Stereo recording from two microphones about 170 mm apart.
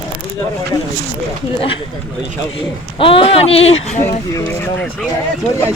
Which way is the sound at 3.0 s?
30° left (ahead or behind).